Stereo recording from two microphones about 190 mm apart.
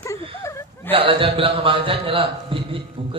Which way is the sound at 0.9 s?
30° right (ahead or behind).